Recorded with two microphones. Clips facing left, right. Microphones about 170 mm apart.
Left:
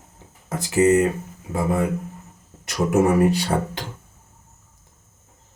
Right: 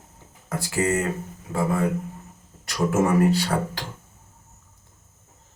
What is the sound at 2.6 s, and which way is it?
Speech, 20° left (ahead or behind).